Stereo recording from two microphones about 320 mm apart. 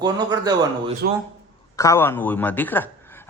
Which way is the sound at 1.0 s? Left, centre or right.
Right.